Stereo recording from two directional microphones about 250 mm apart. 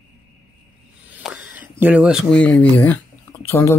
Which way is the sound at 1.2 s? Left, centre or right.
Centre.